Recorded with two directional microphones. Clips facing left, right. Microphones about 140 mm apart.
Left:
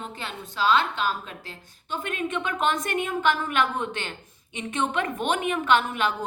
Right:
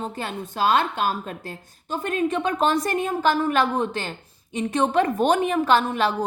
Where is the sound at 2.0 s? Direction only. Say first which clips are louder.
Right 6 dB; 35° right (ahead or behind).